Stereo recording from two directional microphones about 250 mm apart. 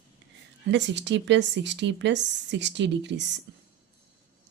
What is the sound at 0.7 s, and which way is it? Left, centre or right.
A woman's voice, right.